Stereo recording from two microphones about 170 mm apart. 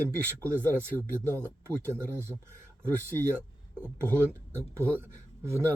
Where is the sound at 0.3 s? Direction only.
15° right (ahead or behind).